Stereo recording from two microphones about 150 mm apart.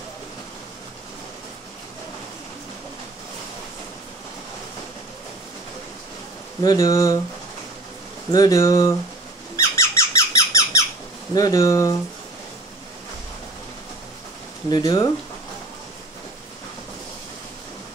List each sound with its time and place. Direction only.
6.6 s speech: 25° left (ahead or behind)
8.3 s speech: 25° left (ahead or behind)
9.6 s squeak: 20° left (ahead or behind)
11.3 s speech: 25° left (ahead or behind)
14.7 s speech: 30° left (ahead or behind)